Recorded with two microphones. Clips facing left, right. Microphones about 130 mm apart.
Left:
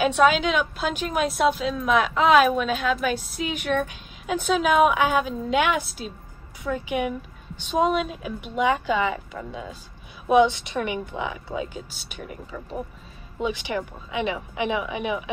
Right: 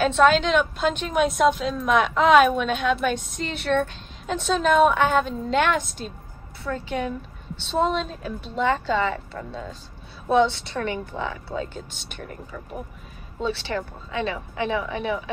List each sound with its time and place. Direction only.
0.0 s a woman's voice: 10° left (ahead or behind)